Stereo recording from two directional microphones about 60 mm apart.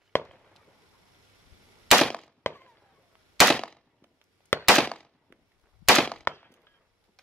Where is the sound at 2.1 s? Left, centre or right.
Centre.